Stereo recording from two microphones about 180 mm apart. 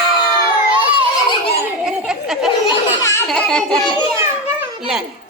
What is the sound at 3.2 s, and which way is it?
Speech, 5° left (ahead or behind).